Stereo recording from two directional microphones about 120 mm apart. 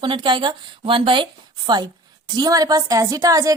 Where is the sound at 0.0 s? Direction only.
40° right (ahead or behind).